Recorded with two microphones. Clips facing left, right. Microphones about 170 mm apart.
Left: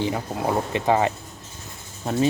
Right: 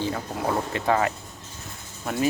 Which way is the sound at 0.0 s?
20° left (ahead or behind).